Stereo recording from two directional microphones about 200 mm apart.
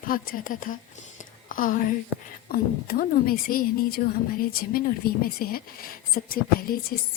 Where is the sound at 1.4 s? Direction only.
40° left (ahead or behind).